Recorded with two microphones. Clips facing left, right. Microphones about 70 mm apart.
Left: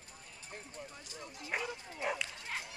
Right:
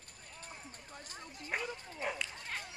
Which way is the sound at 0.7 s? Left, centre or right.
Right.